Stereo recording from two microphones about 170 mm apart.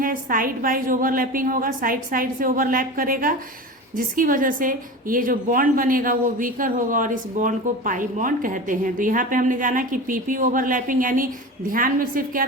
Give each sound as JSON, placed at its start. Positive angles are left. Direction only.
{"t": 0.0, "sound": "a woman's voice", "side_deg": -55}